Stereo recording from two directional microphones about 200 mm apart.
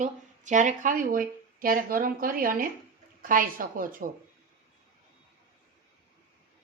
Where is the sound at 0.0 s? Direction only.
40° right (ahead or behind).